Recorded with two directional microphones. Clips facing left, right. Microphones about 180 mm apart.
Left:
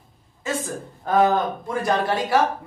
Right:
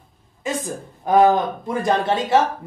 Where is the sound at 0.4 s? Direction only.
15° right (ahead or behind).